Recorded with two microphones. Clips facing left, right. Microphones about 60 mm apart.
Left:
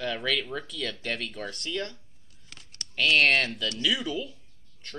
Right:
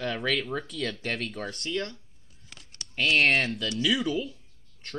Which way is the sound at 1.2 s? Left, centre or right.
Right.